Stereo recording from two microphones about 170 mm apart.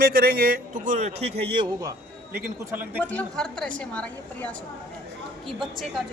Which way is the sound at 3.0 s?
10° left (ahead or behind).